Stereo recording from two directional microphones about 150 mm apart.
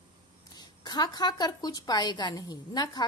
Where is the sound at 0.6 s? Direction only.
25° left (ahead or behind).